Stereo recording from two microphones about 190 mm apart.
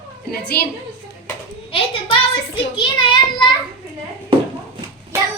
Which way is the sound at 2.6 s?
25° left (ahead or behind).